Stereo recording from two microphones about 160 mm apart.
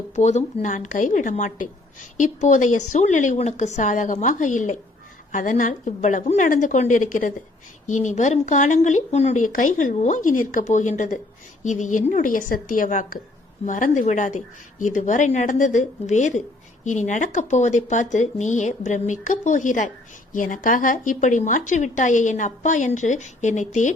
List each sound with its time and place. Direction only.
0.2 s a woman's voice: 45° left (ahead or behind)